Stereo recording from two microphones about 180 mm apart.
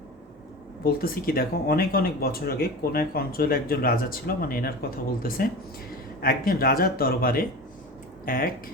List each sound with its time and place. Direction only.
0.9 s speech: 55° left (ahead or behind)